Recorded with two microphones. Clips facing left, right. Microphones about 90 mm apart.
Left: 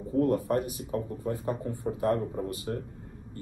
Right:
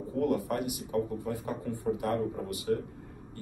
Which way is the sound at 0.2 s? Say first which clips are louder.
Left 3 dB; 30° left (ahead or behind).